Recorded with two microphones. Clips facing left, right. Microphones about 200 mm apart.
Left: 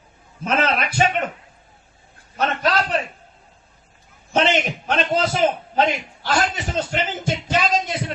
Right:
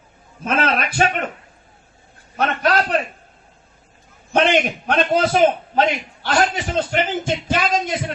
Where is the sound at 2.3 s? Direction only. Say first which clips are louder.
Right 2 dB; 55° right (ahead or behind).